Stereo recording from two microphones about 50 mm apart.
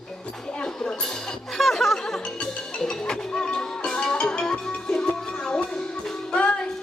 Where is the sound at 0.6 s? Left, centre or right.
Centre.